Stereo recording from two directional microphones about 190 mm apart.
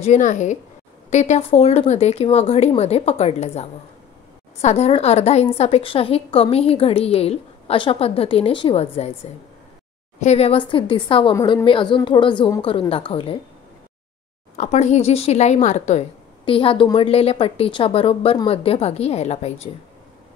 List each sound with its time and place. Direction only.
0.0 s a woman's voice: 40° left (ahead or behind)
14.6 s a woman's voice: 35° left (ahead or behind)